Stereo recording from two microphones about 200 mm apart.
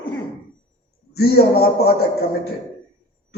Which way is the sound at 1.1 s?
50° left (ahead or behind).